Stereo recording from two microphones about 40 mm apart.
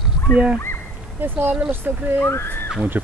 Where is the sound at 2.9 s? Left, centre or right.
Right.